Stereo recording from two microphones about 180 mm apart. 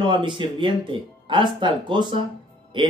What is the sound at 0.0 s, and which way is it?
Speech, 25° right (ahead or behind).